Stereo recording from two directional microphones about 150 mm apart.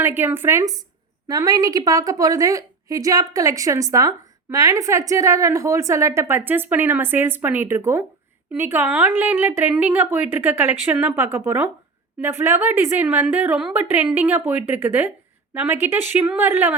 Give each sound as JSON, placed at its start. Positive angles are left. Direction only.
{"t": 0.0, "sound": "a woman's voice", "side_deg": -15}